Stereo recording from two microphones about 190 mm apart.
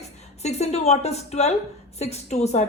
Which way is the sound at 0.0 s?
35° left (ahead or behind).